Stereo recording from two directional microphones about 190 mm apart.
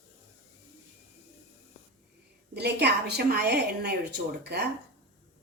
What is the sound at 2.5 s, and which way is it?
A woman's voice, 60° right (ahead or behind).